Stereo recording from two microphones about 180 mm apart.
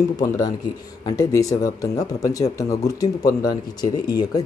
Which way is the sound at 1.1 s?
20° left (ahead or behind).